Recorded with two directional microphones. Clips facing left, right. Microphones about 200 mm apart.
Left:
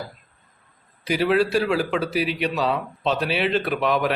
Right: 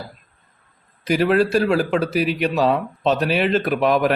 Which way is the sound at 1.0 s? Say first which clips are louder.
Right 3 dB; 45° right (ahead or behind).